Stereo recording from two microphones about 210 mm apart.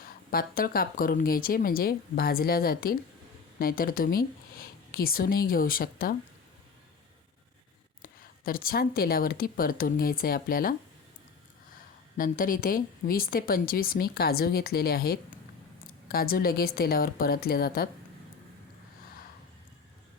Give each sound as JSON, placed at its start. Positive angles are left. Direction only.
{"t": 0.3, "sound": "a woman's voice", "side_deg": 45}
{"t": 8.0, "sound": "a woman's voice", "side_deg": 45}
{"t": 12.1, "sound": "a woman's voice", "side_deg": 40}